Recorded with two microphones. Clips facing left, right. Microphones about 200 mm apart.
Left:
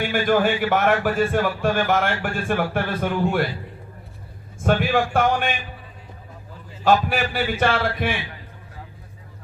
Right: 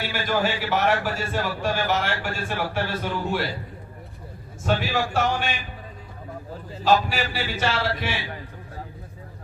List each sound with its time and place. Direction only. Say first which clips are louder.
0.0 s a man's voice: left 6 dB; 50° left (ahead or behind)
4.6 s a man's voice: left 4 dB; 55° left (ahead or behind)
6.8 s a man's voice: left 2 dB; 55° left (ahead or behind)